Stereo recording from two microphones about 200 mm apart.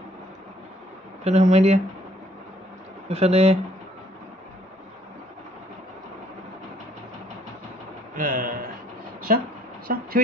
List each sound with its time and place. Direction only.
1.2 s speech: 35° right (ahead or behind)
3.1 s speech: 30° right (ahead or behind)
8.2 s speech: 45° right (ahead or behind)